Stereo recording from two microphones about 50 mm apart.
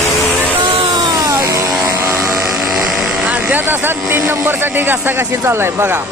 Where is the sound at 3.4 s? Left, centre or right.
Right.